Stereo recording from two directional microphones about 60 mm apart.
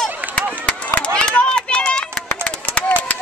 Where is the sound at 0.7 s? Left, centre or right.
Left.